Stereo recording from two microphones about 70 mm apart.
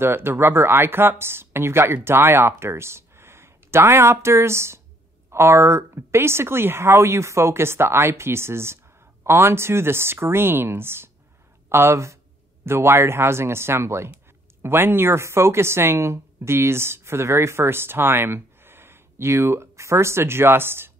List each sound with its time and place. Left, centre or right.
0.0 s speech: right